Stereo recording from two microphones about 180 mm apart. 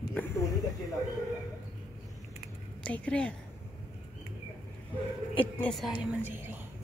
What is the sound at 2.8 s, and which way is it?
Speech, 5° left (ahead or behind).